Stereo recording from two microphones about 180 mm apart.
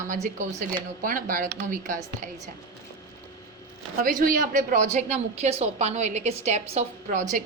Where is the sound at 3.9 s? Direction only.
50° right (ahead or behind).